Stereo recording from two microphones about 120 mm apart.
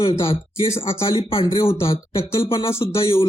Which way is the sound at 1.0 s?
45° left (ahead or behind).